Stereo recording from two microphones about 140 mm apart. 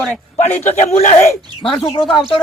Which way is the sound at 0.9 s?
50° left (ahead or behind).